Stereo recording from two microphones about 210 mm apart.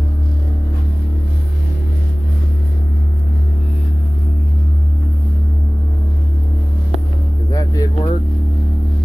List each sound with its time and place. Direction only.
7.5 s music: 15° left (ahead or behind)